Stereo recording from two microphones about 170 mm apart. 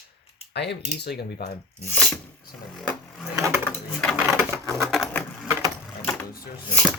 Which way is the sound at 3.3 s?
15° right (ahead or behind).